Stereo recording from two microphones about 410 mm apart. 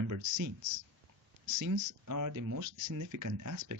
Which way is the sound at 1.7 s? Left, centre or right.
Right.